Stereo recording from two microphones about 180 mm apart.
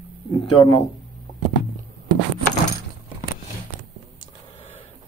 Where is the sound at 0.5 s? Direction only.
30° left (ahead or behind).